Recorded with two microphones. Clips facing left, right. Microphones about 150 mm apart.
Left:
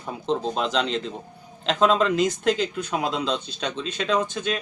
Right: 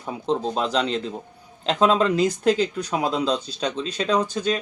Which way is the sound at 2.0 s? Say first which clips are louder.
Right 2 dB; 35° right (ahead or behind).